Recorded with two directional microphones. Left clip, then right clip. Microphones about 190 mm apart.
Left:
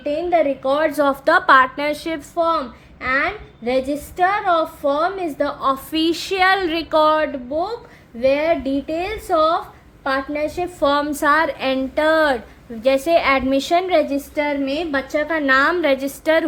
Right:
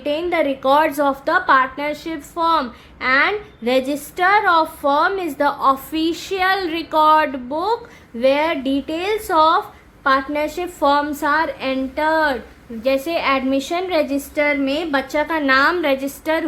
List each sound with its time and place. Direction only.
0.0 s a woman's voice: 20° right (ahead or behind)
0.9 s a woman's voice: 5° right (ahead or behind)
2.3 s a child's voice: 15° right (ahead or behind)
5.9 s a woman's voice: centre (ahead or behind)
7.2 s a woman's voice: 20° right (ahead or behind)
10.9 s a woman's voice: centre (ahead or behind)